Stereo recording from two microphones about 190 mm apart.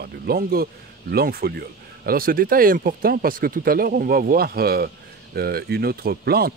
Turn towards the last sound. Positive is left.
turn(degrees=-55)  # may be behind; listen again after turning